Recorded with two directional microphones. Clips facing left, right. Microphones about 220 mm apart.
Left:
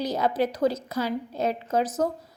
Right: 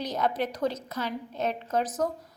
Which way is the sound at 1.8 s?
25° left (ahead or behind).